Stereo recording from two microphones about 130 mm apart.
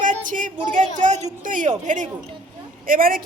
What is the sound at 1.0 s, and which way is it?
A woman's voice, 65° right (ahead or behind).